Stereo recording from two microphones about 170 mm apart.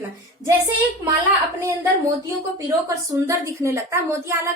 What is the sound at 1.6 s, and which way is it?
A woman's voice, 15° right (ahead or behind).